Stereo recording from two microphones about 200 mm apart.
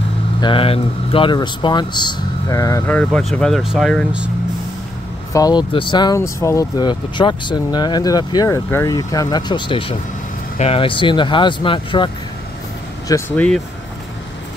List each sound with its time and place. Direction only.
0.4 s speech: 25° left (ahead or behind)
3.0 s speech: 5° left (ahead or behind)
5.3 s speech: 20° left (ahead or behind)
13.1 s speech: 5° left (ahead or behind)